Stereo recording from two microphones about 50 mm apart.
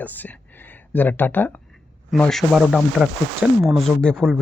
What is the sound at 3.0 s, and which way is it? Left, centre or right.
Speech, centre.